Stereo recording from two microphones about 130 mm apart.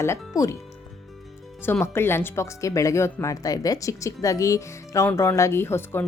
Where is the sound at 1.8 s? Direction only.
20° left (ahead or behind).